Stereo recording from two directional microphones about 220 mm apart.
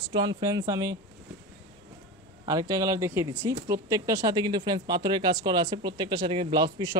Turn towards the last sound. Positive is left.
turn(degrees=-20)  # may be behind; listen again after turning